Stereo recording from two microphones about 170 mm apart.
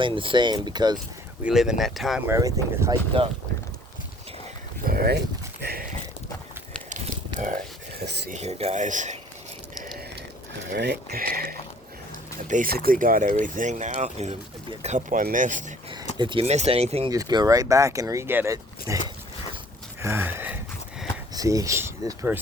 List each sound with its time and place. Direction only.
0.0 s speech: 30° right (ahead or behind)
1.5 s speech: 5° right (ahead or behind)
2.2 s speech: 15° right (ahead or behind)
4.9 s speech: 65° right (ahead or behind)
5.6 s a sound: 65° right (ahead or behind)
7.9 s a sound: 75° right (ahead or behind)
8.3 s speech: 40° right (ahead or behind)
10.7 s speech: 80° right; by 15.6 s 50° right (ahead or behind)
16.1 s speech: 30° right (ahead or behind)
17.1 s speech: 20° right (ahead or behind)
18.5 s dog: 20° right (ahead or behind)
20.0 s wheeze: 15° right (ahead or behind)
21.3 s speech: 20° right (ahead or behind)